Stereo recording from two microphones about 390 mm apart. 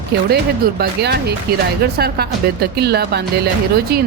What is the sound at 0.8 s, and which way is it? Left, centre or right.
Speech, right.